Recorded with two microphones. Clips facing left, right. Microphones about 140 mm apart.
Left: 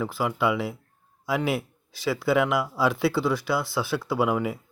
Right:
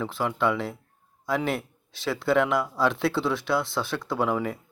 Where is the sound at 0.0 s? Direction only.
5° left (ahead or behind).